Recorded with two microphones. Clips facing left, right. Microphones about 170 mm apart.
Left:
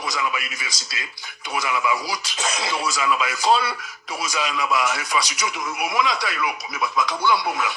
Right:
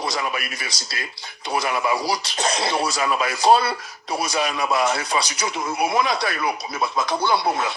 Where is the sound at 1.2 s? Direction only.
30° right (ahead or behind).